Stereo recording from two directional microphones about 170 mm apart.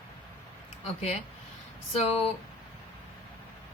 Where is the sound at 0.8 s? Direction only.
40° left (ahead or behind).